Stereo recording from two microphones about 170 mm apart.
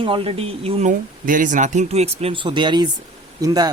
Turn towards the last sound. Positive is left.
turn(degrees=-25)  # may be behind; listen again after turning